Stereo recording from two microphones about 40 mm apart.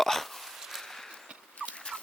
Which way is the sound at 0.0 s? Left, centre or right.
Centre.